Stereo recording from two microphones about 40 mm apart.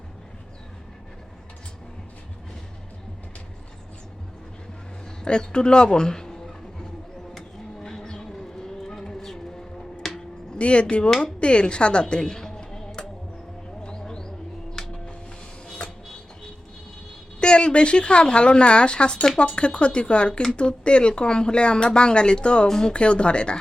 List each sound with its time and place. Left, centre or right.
5.2 s speech: left
7.8 s a sound: centre
10.6 s speech: left
13.8 s bird: centre
15.8 s music: left
17.4 s speech: left